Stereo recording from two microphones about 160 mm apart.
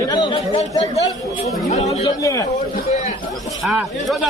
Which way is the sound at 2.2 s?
20° left (ahead or behind).